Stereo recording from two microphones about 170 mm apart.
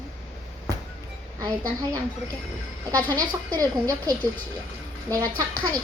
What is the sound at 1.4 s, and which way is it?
Speech, 25° right (ahead or behind).